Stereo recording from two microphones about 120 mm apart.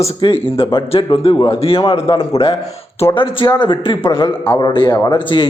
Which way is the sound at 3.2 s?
40° left (ahead or behind).